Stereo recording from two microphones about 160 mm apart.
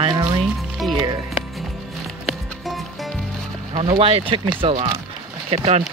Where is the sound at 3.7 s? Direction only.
30° right (ahead or behind).